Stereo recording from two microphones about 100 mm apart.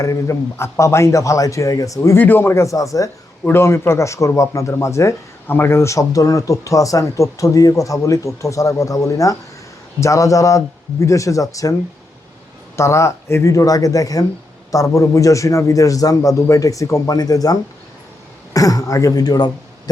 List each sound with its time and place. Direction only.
0.0 s a man's voice: 30° left (ahead or behind)
2.1 s a man's voice: 20° left (ahead or behind)
12.7 s a man's voice: 30° left (ahead or behind)